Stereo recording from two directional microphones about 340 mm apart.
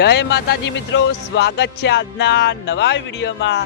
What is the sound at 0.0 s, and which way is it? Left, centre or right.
Speech, left.